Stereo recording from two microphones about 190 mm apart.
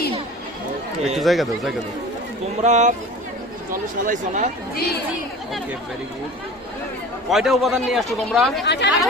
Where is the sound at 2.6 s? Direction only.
40° right (ahead or behind).